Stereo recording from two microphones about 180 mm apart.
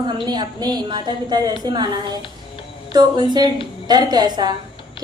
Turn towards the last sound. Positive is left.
turn(degrees=-25)  # may be behind; listen again after turning